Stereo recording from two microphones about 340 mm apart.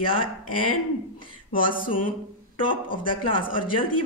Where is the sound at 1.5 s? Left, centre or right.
Left.